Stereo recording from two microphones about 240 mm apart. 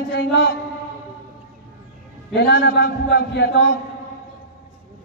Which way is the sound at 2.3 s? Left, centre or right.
Left.